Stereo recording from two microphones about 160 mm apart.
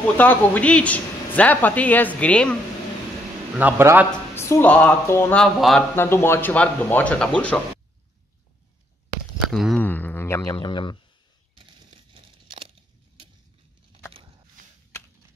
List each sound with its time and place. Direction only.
0.2 s speech: 10° left (ahead or behind)
3.5 s a man's voice: 10° right (ahead or behind)
4.4 s speech: 15° left (ahead or behind)
5.4 s a sound: centre (ahead or behind)
5.9 s speech: 15° left (ahead or behind)
9.5 s speech: centre (ahead or behind)
9.8 s speech: 10° left (ahead or behind)
10.5 s speech: 30° left (ahead or behind)
11.5 s a sound: 30° right (ahead or behind)